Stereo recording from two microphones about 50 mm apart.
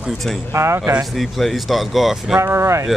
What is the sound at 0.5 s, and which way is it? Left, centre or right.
Speech, right.